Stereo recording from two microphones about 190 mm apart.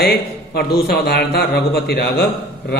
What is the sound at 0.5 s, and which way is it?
Speech, 55° left (ahead or behind).